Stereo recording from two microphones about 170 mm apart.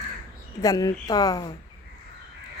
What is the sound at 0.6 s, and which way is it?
Speech, 20° left (ahead or behind).